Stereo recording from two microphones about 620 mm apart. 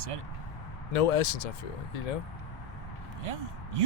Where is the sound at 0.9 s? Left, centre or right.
Left.